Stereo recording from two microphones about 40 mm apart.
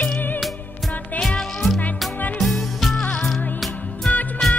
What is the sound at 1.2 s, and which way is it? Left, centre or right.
Music, centre.